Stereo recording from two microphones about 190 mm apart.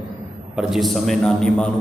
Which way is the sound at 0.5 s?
Centre (ahead or behind).